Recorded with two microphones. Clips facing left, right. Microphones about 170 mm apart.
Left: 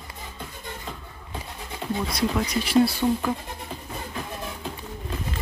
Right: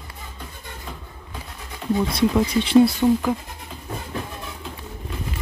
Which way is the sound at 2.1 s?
30° right (ahead or behind).